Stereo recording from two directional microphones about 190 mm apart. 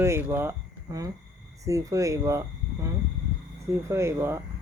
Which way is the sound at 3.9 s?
15° right (ahead or behind).